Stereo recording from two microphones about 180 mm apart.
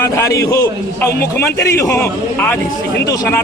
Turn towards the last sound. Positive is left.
turn(degrees=15)  # may be behind; listen again after turning